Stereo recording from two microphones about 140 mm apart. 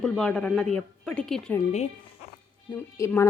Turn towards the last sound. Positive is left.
turn(degrees=20)  # may be behind; listen again after turning